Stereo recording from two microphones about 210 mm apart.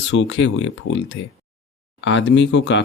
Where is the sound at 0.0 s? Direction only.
60° left (ahead or behind).